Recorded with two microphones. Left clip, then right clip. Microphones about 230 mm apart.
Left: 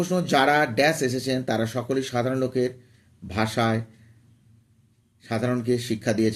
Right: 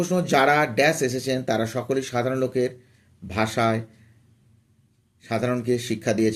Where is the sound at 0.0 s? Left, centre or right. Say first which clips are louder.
Right 1 dB; centre.